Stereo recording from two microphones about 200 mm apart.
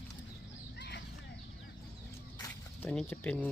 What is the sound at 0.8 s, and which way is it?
Chicken, 55° left (ahead or behind).